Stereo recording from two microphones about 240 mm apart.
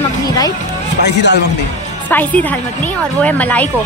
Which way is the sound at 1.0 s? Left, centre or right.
Left.